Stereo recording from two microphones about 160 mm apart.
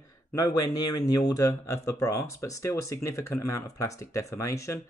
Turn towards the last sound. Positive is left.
turn(degrees=20)  # may be behind; listen again after turning